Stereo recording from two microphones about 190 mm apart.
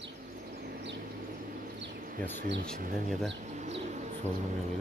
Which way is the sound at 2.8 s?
45° right (ahead or behind).